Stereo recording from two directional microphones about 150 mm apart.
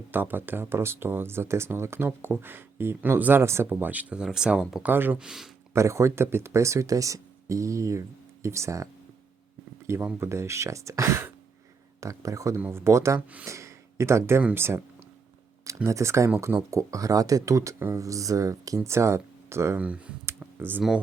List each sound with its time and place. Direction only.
0.1 s speech: 15° right (ahead or behind)
5.7 s speech: 20° right (ahead or behind)